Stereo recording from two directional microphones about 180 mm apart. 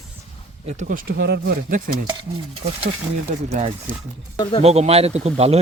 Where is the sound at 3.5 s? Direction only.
40° right (ahead or behind).